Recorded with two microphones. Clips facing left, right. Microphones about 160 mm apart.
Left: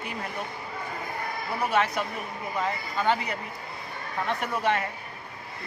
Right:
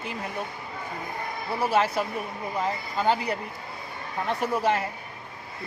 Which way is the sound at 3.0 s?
35° right (ahead or behind).